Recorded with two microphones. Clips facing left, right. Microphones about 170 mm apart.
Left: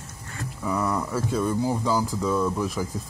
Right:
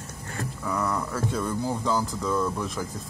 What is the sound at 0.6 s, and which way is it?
Speech, 10° left (ahead or behind).